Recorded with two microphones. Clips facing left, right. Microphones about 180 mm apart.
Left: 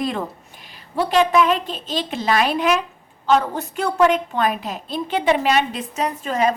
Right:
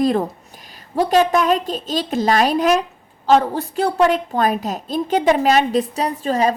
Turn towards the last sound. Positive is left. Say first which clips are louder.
# right 2 dB
turn(degrees=-35)  # may be behind; listen again after turning